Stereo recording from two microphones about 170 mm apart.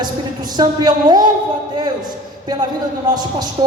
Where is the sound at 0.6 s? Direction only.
25° right (ahead or behind).